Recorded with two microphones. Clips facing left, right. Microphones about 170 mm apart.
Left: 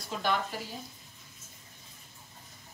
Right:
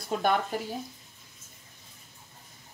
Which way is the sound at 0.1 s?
45° right (ahead or behind).